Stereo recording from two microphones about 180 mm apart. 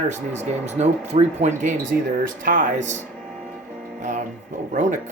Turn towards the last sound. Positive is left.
turn(degrees=-45)  # may be behind; listen again after turning